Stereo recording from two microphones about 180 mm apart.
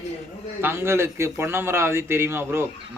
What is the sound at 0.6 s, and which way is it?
Speech, 15° right (ahead or behind).